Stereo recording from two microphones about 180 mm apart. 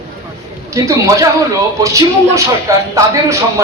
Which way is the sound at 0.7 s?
15° right (ahead or behind).